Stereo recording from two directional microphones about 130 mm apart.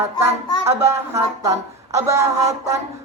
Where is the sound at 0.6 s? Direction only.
20° right (ahead or behind).